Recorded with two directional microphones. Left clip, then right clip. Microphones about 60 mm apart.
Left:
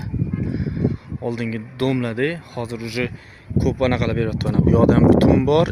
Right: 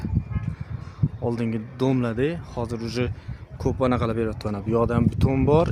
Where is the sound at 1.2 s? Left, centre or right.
Right.